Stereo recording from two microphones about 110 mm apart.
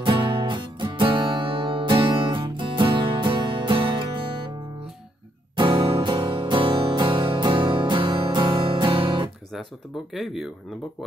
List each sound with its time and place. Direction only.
0.0 s music: 45° right (ahead or behind)
5.6 s music: 50° right (ahead or behind)
10.1 s speech: centre (ahead or behind)